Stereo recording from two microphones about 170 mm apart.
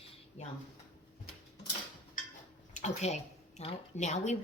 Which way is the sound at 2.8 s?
40° left (ahead or behind).